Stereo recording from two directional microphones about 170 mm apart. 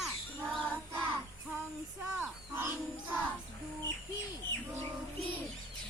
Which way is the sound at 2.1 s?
15° right (ahead or behind).